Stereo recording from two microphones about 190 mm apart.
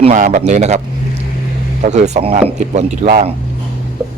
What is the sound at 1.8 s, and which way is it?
A man's voice, 35° right (ahead or behind).